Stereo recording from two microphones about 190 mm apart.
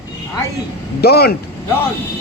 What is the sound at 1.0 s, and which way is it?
Speech, 55° left (ahead or behind).